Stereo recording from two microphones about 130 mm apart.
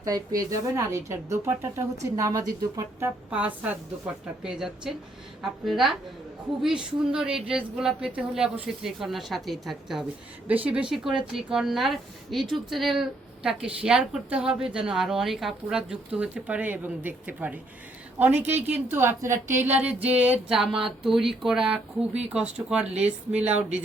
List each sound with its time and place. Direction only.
0.0 s a woman's voice: 30° right (ahead or behind)
3.2 s a woman's voice: 10° right (ahead or behind)